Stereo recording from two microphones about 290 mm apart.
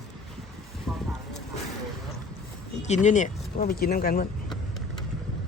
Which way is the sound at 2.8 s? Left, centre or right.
Left.